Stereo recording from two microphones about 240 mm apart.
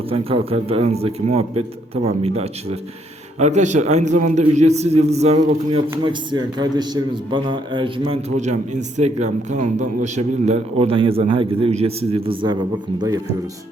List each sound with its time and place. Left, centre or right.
0.1 s a man's voice: right
5.9 s a man's voice: centre